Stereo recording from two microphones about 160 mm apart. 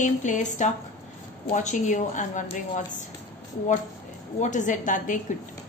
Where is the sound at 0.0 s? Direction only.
50° left (ahead or behind).